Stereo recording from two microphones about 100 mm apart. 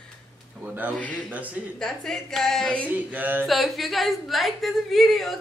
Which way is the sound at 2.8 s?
15° right (ahead or behind).